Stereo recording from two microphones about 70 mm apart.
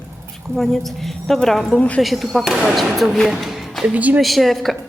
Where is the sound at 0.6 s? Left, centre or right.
Centre.